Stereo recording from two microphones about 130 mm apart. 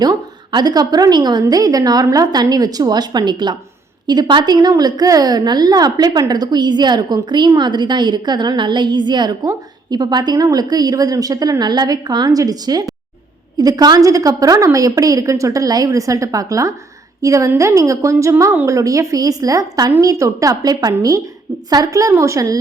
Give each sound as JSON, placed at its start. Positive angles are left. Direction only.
{"t": 0.0, "sound": "a woman's voice", "side_deg": -30}